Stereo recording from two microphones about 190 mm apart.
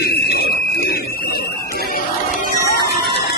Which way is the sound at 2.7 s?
55° left (ahead or behind).